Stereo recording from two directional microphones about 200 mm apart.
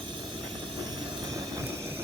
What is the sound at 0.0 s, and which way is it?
Vehicle, 25° right (ahead or behind).